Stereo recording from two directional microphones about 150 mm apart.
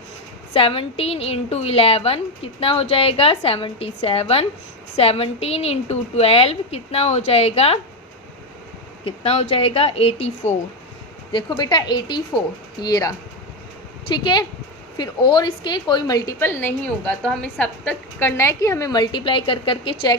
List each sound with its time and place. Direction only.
0.5 s a woman's voice: 40° left (ahead or behind)
9.0 s a woman's voice: 45° left (ahead or behind)
11.3 s a woman's voice: 30° left (ahead or behind)